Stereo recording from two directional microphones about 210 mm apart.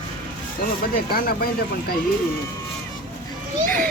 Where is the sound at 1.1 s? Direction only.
45° left (ahead or behind).